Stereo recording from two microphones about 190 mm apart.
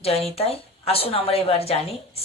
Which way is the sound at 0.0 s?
30° left (ahead or behind).